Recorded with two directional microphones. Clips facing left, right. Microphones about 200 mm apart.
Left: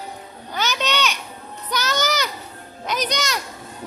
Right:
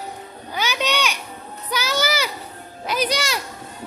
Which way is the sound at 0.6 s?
10° right (ahead or behind).